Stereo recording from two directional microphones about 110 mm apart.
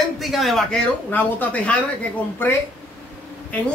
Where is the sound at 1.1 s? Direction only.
15° left (ahead or behind).